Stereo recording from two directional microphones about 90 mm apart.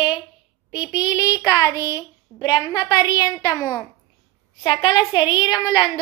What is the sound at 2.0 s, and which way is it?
A woman's voice, 55° left (ahead or behind).